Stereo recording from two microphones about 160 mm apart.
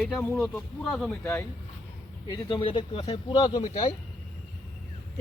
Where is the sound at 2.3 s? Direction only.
30° left (ahead or behind).